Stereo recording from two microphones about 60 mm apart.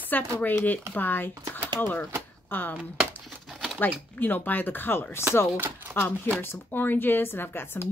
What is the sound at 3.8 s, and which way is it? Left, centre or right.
Speech, left.